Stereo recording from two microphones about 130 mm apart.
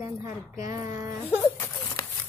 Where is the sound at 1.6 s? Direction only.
20° left (ahead or behind).